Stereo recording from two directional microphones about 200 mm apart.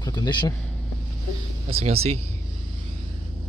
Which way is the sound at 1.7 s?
30° right (ahead or behind).